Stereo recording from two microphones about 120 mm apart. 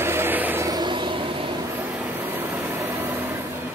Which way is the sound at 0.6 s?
35° right (ahead or behind).